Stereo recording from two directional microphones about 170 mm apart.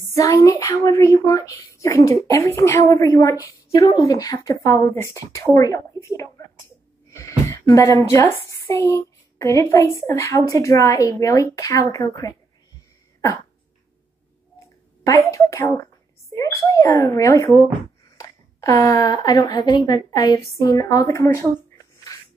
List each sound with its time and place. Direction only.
0.1 s a woman's voice: 20° left (ahead or behind)
7.1 s a sound: 15° left (ahead or behind)
8.1 s a woman's voice: 15° left (ahead or behind)
15.0 s a woman's voice: 20° left (ahead or behind)
22.1 s rub: 20° left (ahead or behind)